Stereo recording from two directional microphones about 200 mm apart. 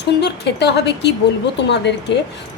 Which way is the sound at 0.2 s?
55° left (ahead or behind).